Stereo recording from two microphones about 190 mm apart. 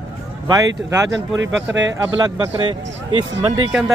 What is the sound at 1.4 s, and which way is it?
Speech, 75° right (ahead or behind).